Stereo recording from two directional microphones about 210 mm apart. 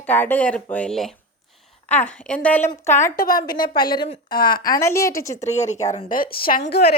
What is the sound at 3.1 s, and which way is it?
Speech, 40° left (ahead or behind).